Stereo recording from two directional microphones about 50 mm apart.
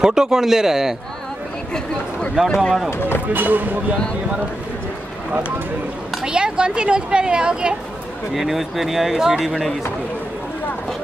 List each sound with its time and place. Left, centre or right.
0.0 s speech: centre
2.4 s speech: centre
2.9 s speech: left
3.3 s speech: right
6.2 s speech: centre
8.4 s speech: centre